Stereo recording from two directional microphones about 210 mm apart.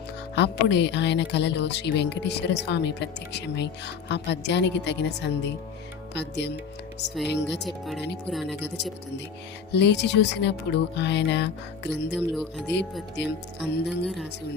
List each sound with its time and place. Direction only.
0.3 s speech: 55° left (ahead or behind)
8.3 s speech: centre (ahead or behind)
9.7 s speech: 55° left (ahead or behind)
11.9 s speech: centre (ahead or behind)